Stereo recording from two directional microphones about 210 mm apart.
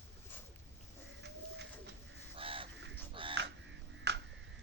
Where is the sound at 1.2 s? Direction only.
55° right (ahead or behind).